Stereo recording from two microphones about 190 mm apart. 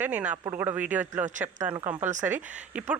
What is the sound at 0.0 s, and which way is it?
Speech, 5° right (ahead or behind).